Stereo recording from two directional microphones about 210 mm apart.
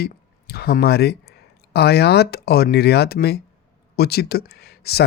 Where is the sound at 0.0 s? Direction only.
50° left (ahead or behind).